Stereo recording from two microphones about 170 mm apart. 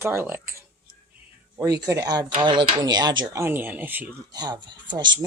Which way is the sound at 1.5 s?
20° right (ahead or behind).